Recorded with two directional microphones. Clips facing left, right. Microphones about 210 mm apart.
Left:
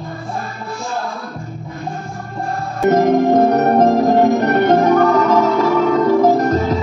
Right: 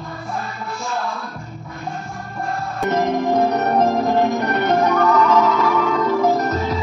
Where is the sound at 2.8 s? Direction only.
45° left (ahead or behind).